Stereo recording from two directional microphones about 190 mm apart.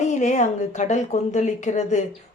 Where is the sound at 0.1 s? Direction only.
40° left (ahead or behind).